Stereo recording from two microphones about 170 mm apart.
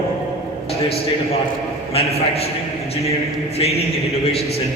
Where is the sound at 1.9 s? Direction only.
35° left (ahead or behind).